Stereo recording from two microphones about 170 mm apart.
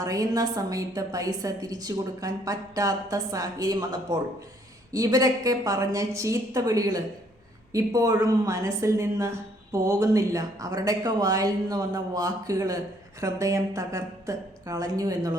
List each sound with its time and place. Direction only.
0.0 s a woman's voice: 20° right (ahead or behind)